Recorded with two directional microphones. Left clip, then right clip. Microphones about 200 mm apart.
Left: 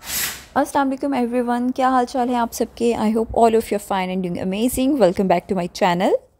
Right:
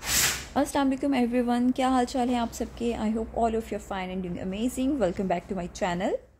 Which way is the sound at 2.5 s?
40° left (ahead or behind).